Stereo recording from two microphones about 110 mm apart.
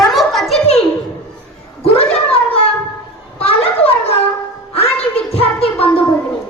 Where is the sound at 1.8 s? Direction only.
65° left (ahead or behind).